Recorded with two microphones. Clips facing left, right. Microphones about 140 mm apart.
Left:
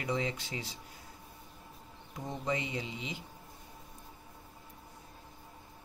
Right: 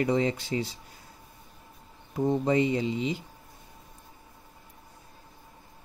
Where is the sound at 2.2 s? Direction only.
35° right (ahead or behind).